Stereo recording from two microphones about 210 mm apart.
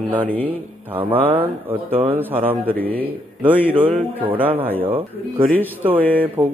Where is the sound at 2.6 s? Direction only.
10° left (ahead or behind).